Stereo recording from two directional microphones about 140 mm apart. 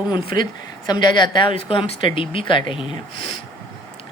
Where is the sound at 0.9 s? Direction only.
30° left (ahead or behind).